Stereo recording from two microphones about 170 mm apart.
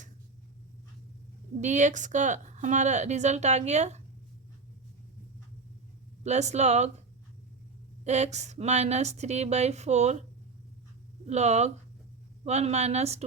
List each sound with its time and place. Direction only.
1.6 s a woman's voice: 45° right (ahead or behind)
6.2 s a woman's voice: 40° right (ahead or behind)
8.0 s a woman's voice: 40° right (ahead or behind)
11.3 s a woman's voice: 40° right (ahead or behind)